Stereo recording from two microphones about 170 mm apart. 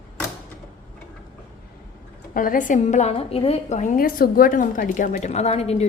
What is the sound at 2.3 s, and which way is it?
A woman's voice, 55° left (ahead or behind).